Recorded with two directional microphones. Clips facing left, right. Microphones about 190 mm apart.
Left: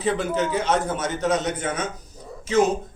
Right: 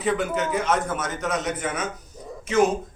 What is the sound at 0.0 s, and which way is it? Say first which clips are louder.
A man's voice: left 1 dB; 35° left (ahead or behind).